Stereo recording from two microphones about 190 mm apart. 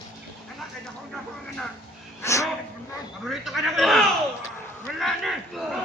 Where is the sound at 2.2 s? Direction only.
15° left (ahead or behind).